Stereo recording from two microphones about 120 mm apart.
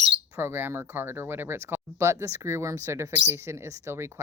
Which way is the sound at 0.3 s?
20° right (ahead or behind).